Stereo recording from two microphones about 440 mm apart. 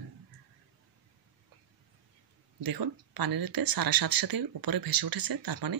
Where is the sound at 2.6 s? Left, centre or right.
Right.